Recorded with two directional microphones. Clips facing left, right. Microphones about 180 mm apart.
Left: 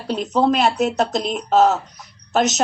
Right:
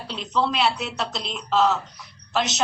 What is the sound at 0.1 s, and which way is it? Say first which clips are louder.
Speech: left 7 dB; 45° left (ahead or behind).